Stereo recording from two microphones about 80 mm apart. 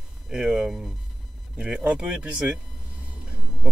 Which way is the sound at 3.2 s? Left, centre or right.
Centre.